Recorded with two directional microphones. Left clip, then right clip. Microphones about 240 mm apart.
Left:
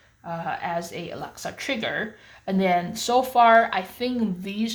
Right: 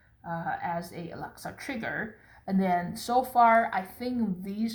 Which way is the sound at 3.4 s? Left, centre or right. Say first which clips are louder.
Left 5 dB; left.